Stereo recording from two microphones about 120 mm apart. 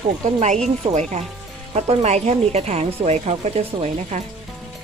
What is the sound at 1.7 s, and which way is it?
Speech, 65° right (ahead or behind).